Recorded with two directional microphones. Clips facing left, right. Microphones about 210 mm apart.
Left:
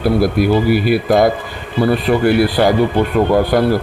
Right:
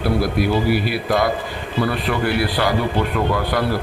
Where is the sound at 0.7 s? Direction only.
45° left (ahead or behind).